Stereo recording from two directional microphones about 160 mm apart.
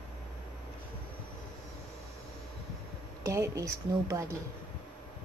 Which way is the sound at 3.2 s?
20° right (ahead or behind).